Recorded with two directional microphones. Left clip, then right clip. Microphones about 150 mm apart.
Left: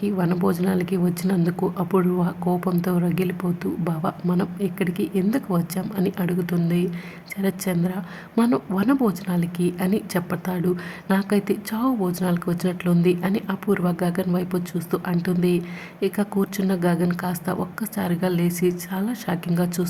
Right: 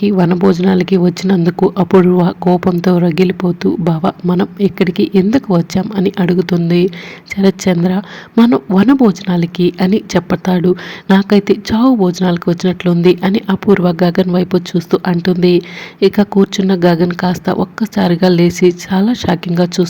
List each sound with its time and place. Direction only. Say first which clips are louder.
0.0 s a woman's voice: right 11 dB; 35° right (ahead or behind)